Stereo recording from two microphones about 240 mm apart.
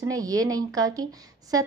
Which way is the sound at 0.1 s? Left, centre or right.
Centre.